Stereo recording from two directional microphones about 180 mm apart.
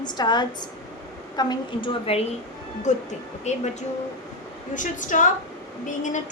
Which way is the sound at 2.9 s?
40° left (ahead or behind).